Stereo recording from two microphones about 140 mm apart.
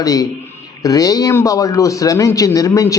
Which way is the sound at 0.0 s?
25° left (ahead or behind).